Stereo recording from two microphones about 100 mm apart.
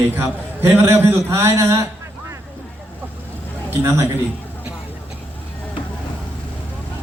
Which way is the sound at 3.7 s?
25° right (ahead or behind).